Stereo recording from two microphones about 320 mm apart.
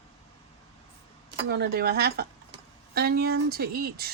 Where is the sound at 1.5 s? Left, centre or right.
Right.